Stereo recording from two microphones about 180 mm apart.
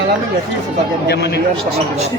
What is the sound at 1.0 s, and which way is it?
Speech, 65° left (ahead or behind).